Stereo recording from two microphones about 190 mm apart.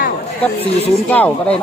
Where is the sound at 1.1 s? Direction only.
10° left (ahead or behind).